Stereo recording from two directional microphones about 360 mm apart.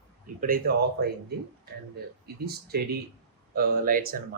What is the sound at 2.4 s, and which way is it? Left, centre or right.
Speech, right.